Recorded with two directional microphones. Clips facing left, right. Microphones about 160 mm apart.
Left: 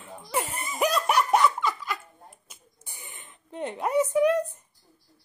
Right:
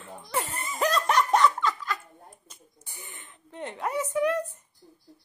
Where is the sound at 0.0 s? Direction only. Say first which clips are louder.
Left 1 dB; 10° left (ahead or behind).